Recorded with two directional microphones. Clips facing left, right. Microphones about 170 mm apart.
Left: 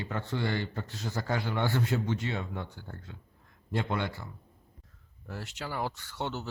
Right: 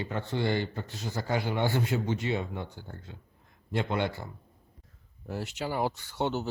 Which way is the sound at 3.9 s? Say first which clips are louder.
Right 3 dB; 25° right (ahead or behind).